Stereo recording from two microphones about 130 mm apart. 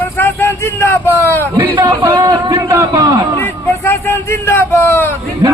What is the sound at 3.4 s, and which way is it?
Speech, 20° left (ahead or behind).